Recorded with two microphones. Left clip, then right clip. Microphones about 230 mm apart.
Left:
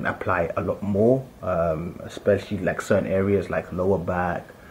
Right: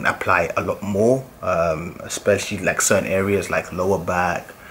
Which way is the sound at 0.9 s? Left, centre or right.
Left.